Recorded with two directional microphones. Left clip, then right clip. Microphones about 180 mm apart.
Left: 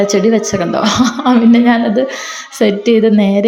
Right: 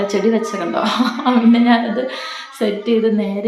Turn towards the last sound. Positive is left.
turn(degrees=40)  # may be behind; listen again after turning